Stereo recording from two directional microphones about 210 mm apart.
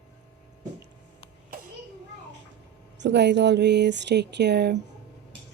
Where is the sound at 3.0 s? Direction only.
55° right (ahead or behind).